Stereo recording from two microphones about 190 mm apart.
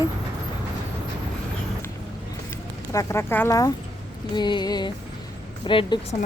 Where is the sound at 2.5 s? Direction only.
15° left (ahead or behind).